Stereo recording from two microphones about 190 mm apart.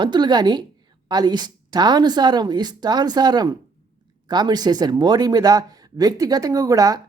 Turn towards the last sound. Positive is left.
turn(degrees=-20)  # may be behind; listen again after turning